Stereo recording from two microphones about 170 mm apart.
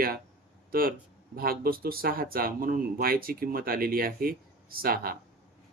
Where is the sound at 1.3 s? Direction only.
60° right (ahead or behind).